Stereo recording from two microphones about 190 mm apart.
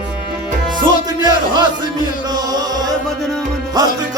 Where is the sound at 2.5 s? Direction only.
20° right (ahead or behind).